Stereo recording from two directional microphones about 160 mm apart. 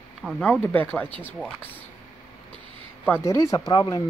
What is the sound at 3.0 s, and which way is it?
Speech, 15° left (ahead or behind).